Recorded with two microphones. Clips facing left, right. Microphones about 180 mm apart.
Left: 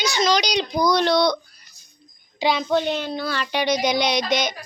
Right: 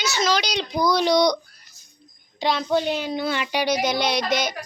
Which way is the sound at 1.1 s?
15° right (ahead or behind).